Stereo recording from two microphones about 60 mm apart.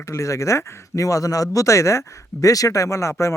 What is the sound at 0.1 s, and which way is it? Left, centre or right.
Speech, left.